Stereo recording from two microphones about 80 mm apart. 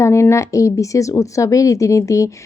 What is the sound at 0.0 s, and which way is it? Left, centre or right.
A woman's voice, left.